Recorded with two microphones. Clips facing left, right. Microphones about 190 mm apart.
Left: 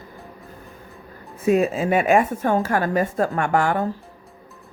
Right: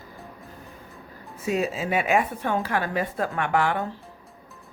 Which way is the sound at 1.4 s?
50° left (ahead or behind).